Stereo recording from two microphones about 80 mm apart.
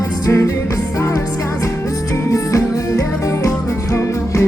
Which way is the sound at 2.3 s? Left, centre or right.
Left.